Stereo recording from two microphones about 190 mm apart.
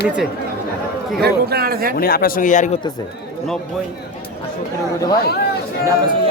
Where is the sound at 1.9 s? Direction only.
50° left (ahead or behind).